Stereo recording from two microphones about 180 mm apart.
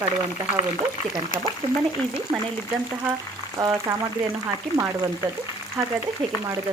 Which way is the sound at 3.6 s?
20° right (ahead or behind).